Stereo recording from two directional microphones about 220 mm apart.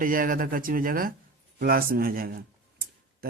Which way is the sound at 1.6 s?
40° right (ahead or behind).